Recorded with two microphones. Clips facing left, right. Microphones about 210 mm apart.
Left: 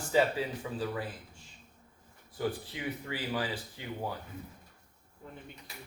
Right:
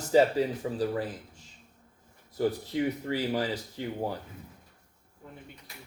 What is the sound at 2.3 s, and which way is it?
Speech, 40° right (ahead or behind).